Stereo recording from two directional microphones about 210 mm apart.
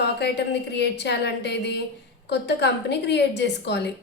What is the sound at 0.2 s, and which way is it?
A woman's voice, 55° left (ahead or behind).